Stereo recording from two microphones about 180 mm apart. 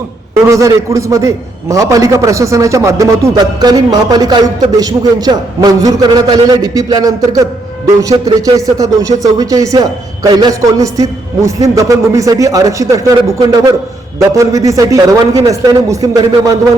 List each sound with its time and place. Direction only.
0.4 s a man's voice: 15° right (ahead or behind)